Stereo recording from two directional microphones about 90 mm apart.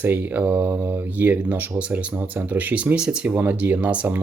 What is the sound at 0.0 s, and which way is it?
Speech, 20° right (ahead or behind).